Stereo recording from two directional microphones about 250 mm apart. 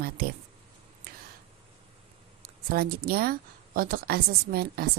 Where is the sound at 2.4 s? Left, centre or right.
Right.